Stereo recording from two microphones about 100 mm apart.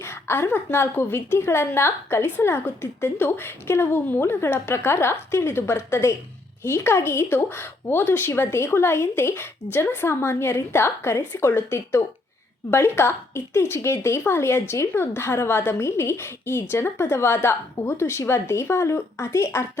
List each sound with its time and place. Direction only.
0.0 s a woman's voice: 25° left (ahead or behind)